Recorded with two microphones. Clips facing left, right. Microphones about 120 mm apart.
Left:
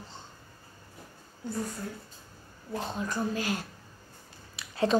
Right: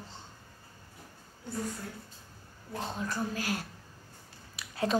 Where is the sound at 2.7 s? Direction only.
25° left (ahead or behind).